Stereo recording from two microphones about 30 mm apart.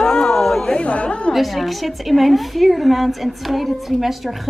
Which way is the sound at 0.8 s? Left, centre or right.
Left.